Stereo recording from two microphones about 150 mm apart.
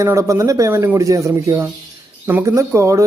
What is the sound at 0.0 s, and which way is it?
Speech, 20° right (ahead or behind).